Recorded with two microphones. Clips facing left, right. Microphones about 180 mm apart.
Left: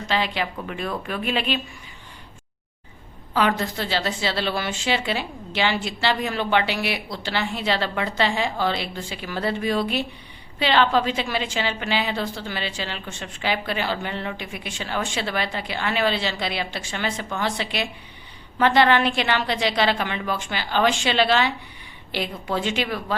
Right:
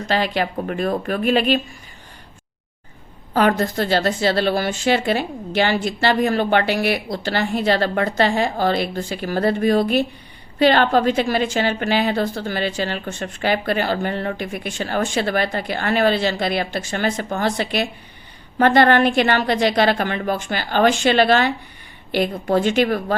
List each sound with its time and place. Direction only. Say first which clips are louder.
0.1 s a woman's voice: right 4 dB; 45° right (ahead or behind)
3.3 s a woman's voice: right 5 dB; 45° right (ahead or behind)